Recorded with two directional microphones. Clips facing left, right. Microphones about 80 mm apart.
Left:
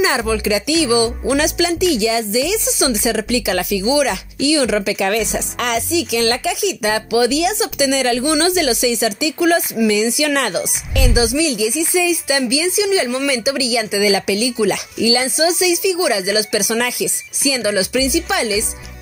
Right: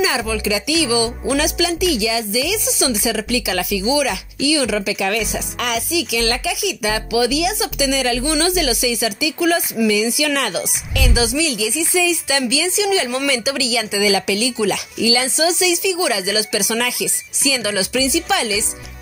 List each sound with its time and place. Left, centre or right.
0.0 s speech: left
3.2 s speech: left
8.0 s speech: left
8.3 s speech: left